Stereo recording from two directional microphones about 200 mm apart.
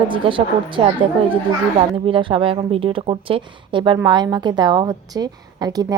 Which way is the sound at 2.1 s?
25° right (ahead or behind).